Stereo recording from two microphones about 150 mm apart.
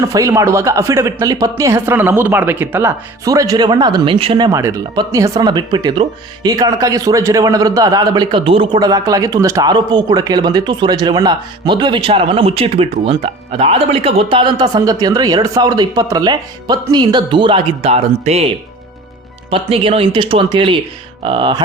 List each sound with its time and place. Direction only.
0.1 s speech: 20° right (ahead or behind); by 18.4 s 45° right (ahead or behind)
19.5 s speech: 40° right (ahead or behind)